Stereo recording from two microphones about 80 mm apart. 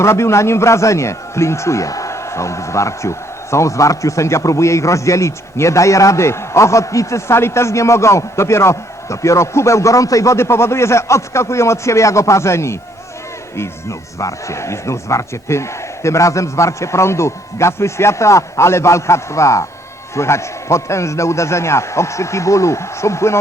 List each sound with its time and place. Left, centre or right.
0.0 s a man's voice: left